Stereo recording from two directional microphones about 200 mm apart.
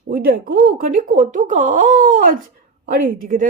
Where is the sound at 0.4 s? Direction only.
45° right (ahead or behind).